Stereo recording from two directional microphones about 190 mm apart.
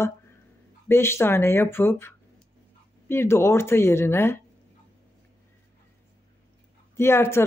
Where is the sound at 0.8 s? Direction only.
15° left (ahead or behind).